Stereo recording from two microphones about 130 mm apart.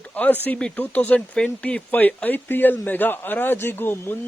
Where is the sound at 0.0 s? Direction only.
10° left (ahead or behind).